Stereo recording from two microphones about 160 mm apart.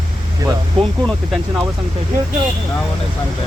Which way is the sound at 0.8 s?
Centre (ahead or behind).